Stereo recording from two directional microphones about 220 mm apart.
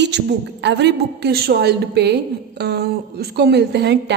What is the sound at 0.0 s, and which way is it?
A woman's voice, 50° right (ahead or behind).